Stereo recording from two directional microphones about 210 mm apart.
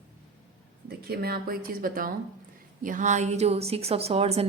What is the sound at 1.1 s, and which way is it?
A woman's voice, 50° right (ahead or behind).